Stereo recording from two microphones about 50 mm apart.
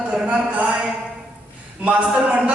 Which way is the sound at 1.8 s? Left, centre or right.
Right.